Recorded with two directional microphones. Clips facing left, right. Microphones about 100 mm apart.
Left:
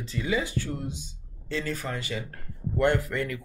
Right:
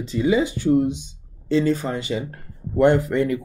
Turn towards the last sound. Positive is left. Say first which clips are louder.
# right 8 dB
turn(degrees=-20)  # may be behind; listen again after turning